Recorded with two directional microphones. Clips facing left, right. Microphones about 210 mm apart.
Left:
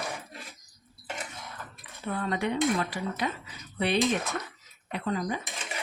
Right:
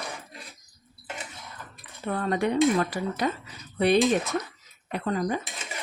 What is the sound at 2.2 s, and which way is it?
Speech, 40° right (ahead or behind).